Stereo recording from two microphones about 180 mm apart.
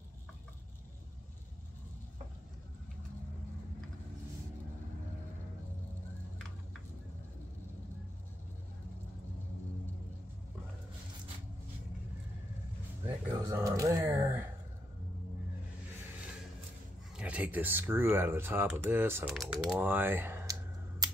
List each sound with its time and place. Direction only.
13.0 s a sound: 15° right (ahead or behind)
17.2 s speech: 10° right (ahead or behind)
19.3 s speech: centre (ahead or behind)